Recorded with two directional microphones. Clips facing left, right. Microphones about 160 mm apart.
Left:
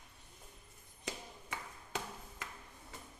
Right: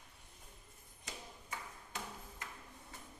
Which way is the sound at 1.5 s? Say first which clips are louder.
Left 4 dB; 75° left (ahead or behind).